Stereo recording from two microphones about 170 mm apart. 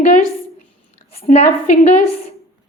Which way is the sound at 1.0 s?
35° left (ahead or behind).